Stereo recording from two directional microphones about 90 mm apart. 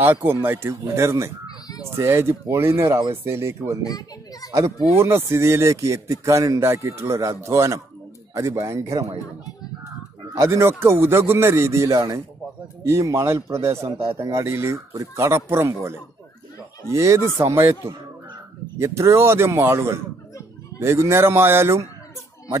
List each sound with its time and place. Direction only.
0.0 s speech: 25° right (ahead or behind)
3.8 s children playing: 45° left (ahead or behind)
4.5 s a man's voice: 35° right (ahead or behind)
10.3 s a man's voice: 30° right (ahead or behind)